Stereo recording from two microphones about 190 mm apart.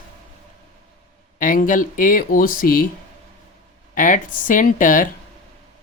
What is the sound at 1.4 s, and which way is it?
Speech, 45° left (ahead or behind).